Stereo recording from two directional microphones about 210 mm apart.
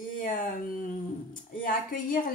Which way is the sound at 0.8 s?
40° left (ahead or behind).